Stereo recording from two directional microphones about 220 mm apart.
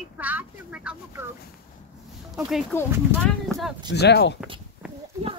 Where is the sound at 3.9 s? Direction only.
50° left (ahead or behind).